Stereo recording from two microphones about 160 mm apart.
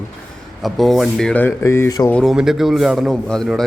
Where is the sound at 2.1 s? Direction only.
Centre (ahead or behind).